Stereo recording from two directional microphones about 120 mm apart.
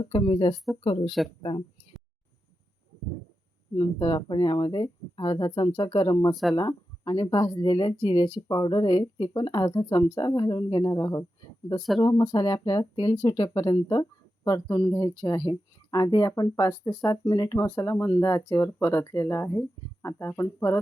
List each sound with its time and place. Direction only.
0.0 s speech: 45° left (ahead or behind)
3.8 s speech: 40° left (ahead or behind)
6.3 s speech: centre (ahead or behind)
6.6 s speech: 35° left (ahead or behind)